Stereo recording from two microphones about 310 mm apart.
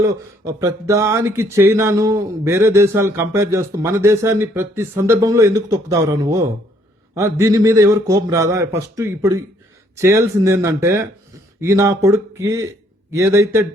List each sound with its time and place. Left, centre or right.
0.0 s speech: centre